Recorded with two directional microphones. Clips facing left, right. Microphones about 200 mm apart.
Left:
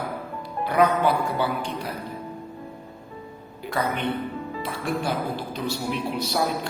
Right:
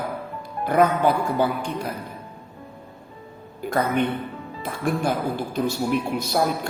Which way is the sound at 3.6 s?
45° right (ahead or behind).